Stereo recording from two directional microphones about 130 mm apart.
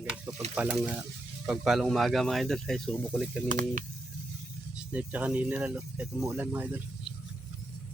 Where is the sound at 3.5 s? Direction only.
90° right.